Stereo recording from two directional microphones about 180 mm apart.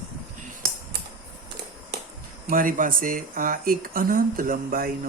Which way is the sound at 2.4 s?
50° right (ahead or behind).